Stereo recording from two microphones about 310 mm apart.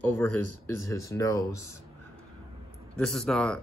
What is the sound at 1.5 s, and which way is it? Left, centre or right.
Speech, left.